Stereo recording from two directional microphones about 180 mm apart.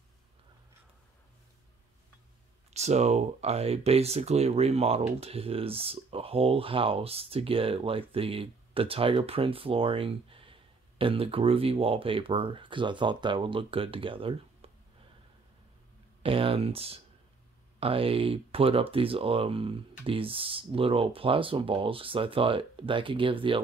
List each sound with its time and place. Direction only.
2.7 s speech: 35° right (ahead or behind)
16.2 s speech: 30° right (ahead or behind)